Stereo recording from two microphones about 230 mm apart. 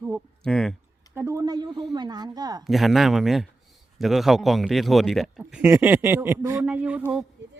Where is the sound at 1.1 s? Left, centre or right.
Centre.